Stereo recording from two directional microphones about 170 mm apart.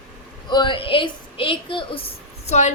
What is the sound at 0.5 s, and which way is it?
A woman's voice, 30° left (ahead or behind).